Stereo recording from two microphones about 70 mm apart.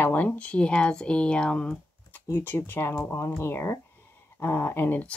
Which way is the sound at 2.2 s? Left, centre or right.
Left.